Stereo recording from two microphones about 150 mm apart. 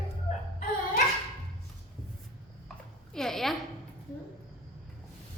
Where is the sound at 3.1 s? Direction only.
5° left (ahead or behind).